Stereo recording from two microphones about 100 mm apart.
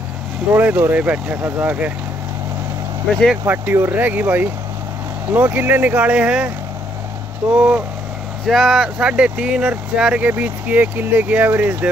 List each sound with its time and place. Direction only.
0.5 s speech: 20° right (ahead or behind)
3.4 s speech: 20° right (ahead or behind)
7.5 s speech: 10° right (ahead or behind)